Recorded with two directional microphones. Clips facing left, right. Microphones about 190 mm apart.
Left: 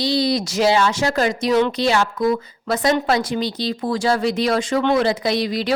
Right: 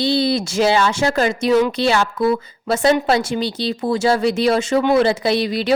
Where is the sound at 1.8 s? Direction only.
60° right (ahead or behind).